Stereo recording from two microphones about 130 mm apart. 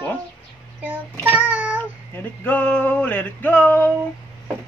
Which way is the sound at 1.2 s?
15° right (ahead or behind).